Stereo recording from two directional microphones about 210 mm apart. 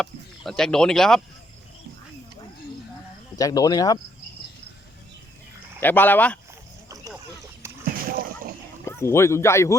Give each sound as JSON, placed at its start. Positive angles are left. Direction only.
{"t": 0.0, "sound": "speech", "side_deg": 5}
{"t": 3.3, "sound": "speech", "side_deg": 15}
{"t": 5.8, "sound": "speech", "side_deg": 10}
{"t": 7.9, "sound": "splash", "side_deg": -45}
{"t": 8.9, "sound": "speech", "side_deg": 10}